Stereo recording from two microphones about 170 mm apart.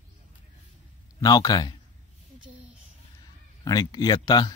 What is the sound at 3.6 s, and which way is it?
Speech, 20° left (ahead or behind).